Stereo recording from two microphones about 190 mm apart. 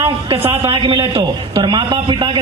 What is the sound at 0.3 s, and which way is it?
A man's voice, 30° right (ahead or behind).